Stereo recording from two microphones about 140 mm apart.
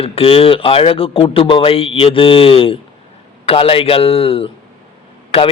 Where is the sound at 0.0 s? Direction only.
40° left (ahead or behind).